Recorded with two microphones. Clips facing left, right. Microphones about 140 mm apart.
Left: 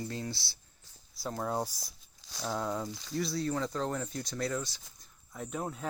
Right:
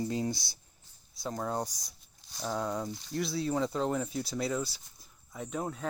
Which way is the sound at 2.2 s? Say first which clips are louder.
Even; 90° left.